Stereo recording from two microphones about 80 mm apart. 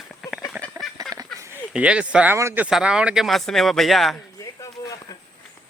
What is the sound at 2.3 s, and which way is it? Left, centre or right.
Speech, right.